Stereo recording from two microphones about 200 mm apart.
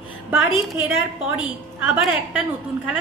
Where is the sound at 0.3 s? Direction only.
10° right (ahead or behind).